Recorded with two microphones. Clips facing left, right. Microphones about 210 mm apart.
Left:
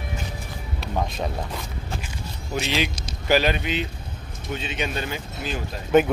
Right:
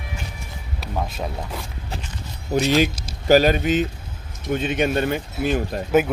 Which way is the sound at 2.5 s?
45° right (ahead or behind).